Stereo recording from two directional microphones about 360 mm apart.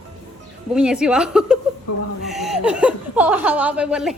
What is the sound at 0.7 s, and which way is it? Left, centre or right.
Speech, centre.